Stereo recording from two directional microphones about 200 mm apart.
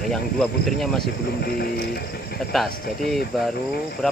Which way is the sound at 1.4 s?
50° left (ahead or behind).